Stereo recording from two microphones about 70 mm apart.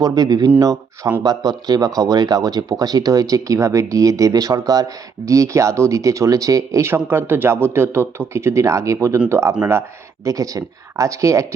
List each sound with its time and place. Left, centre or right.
0.0 s speech: right
10.2 s speech: right